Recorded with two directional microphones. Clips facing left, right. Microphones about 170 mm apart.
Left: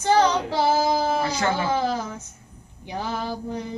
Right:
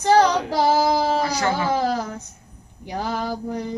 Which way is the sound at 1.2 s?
25° left (ahead or behind).